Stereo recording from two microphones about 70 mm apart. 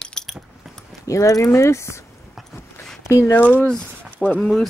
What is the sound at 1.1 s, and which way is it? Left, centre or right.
Speech, left.